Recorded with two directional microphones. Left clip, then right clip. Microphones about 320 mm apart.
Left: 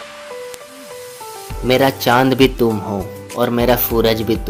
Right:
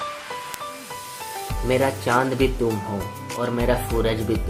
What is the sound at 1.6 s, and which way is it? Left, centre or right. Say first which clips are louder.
Speech: left 8 dB; left.